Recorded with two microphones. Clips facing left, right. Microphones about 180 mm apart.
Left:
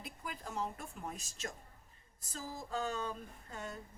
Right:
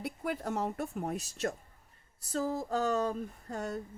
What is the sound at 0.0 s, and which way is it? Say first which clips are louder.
Speech: right 11 dB; 70° right (ahead or behind).